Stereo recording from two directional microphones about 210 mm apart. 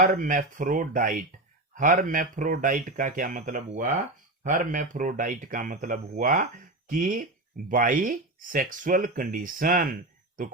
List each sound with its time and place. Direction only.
0.0 s speech: 40° right (ahead or behind)